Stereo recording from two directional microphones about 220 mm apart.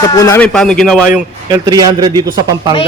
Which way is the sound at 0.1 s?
15° left (ahead or behind).